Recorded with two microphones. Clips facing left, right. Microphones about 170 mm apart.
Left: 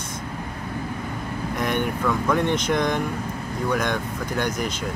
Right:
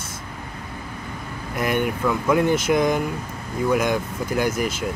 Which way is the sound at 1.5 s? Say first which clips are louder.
Right 3 dB; 5° right (ahead or behind).